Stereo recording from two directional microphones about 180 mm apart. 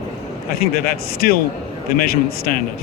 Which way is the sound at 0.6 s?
55° left (ahead or behind).